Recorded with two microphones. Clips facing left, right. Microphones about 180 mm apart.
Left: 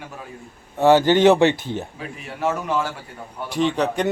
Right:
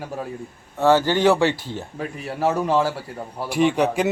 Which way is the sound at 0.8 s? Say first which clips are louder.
Left 3 dB; 15° left (ahead or behind).